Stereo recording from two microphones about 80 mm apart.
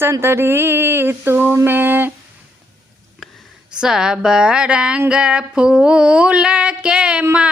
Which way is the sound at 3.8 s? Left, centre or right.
Centre.